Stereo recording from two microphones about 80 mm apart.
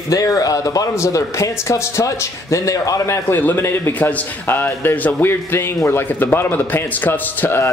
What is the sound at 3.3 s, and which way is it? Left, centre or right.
A man's voice, left.